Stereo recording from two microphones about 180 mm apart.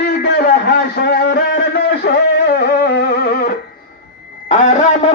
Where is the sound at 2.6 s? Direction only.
65° left (ahead or behind).